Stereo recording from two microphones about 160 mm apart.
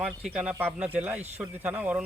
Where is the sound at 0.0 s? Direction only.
5° right (ahead or behind).